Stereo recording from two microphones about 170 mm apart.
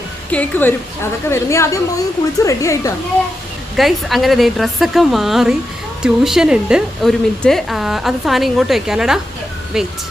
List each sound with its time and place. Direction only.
0.3 s a woman's voice: 10° left (ahead or behind)
3.8 s speech: centre (ahead or behind)